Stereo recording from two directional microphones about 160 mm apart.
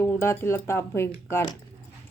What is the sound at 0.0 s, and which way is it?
A woman's voice, 15° left (ahead or behind).